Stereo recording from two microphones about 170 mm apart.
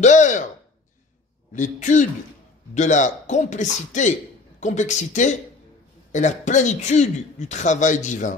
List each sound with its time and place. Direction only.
0.0 s speech: 45° left (ahead or behind)
1.5 s speech: 45° left (ahead or behind)